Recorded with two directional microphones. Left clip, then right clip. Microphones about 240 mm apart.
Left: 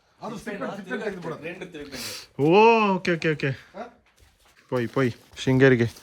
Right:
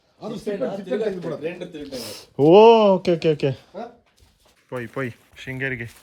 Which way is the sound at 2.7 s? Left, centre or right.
Centre.